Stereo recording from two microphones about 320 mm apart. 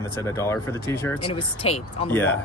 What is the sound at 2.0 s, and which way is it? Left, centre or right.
Speech, centre.